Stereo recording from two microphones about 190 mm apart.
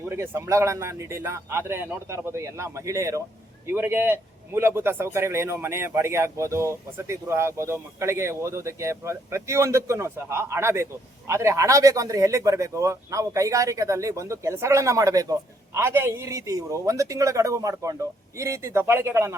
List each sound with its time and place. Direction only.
0.1 s a man's voice: 15° right (ahead or behind)